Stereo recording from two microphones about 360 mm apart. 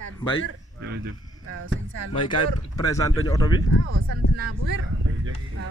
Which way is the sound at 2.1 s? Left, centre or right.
Centre.